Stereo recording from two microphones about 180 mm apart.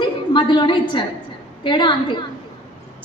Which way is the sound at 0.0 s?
25° left (ahead or behind).